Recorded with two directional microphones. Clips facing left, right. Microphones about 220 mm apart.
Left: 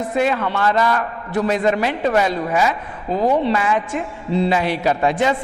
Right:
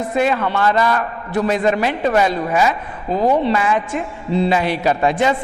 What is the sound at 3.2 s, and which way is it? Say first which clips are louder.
Speech: right 1 dB; 35° right (ahead or behind).